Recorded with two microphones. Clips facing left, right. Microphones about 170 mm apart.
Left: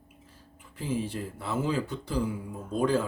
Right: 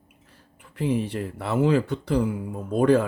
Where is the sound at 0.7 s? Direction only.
65° right (ahead or behind).